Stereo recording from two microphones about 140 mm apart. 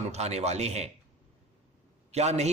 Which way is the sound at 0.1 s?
50° right (ahead or behind).